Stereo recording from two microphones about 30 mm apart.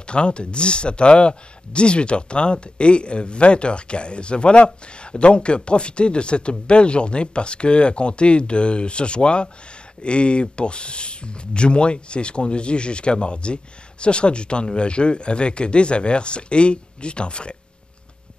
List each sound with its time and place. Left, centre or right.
0.0 s speech: left